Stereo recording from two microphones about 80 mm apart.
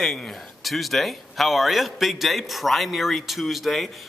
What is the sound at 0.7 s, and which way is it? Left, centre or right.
A man's voice, centre.